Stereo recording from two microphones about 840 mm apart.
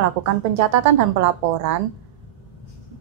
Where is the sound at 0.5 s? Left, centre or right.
Right.